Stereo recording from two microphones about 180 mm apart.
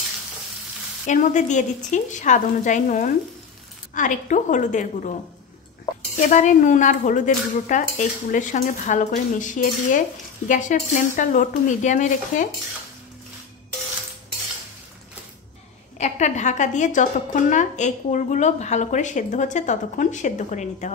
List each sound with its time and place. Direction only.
1.0 s a woman's voice: 45° left (ahead or behind)
16.0 s a woman's voice: 40° left (ahead or behind)